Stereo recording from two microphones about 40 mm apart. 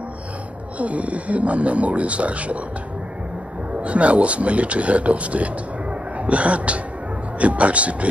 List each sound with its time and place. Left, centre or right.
0.7 s speech: right
3.8 s speech: right